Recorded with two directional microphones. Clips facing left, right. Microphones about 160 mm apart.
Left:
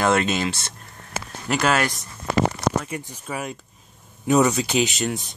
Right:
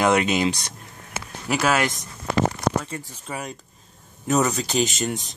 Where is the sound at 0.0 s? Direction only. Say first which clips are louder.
Right 1 dB; 15° right (ahead or behind).